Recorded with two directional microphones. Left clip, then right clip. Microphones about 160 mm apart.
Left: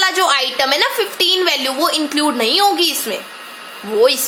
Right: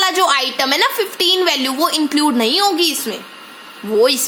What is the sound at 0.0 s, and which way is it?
A woman's voice, 35° right (ahead or behind).